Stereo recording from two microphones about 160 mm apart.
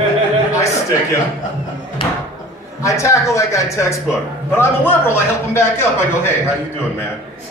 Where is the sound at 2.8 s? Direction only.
20° left (ahead or behind).